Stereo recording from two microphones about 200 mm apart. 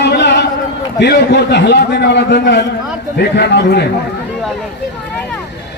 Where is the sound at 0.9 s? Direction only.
55° left (ahead or behind).